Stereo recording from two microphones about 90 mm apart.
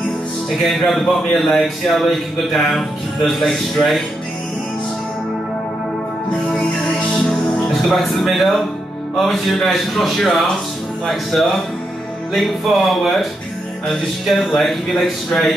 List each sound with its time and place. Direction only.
0.6 s speech: centre (ahead or behind)
7.2 s music: 5° left (ahead or behind)
9.1 s speech: 5° left (ahead or behind)